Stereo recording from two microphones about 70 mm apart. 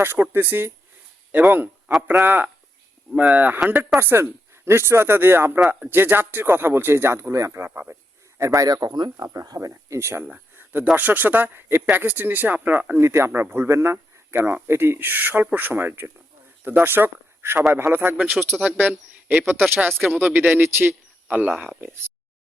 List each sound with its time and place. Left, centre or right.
0.0 s speech: right
8.4 s speech: right
8.7 s speech: right
9.2 s speech: right
10.5 s a sound: right
10.9 s speech: right
13.0 s speech: right